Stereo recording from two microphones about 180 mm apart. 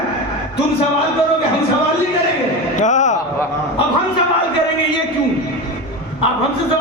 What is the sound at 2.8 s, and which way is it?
Speech, 40° left (ahead or behind).